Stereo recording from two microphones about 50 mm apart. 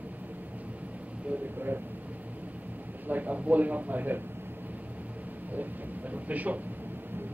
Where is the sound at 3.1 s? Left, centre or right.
Right.